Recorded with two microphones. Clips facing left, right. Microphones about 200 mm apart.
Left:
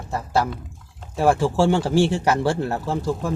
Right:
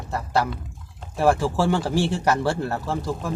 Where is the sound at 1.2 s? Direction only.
15° left (ahead or behind).